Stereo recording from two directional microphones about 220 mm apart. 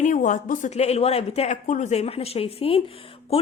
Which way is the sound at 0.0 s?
35° left (ahead or behind).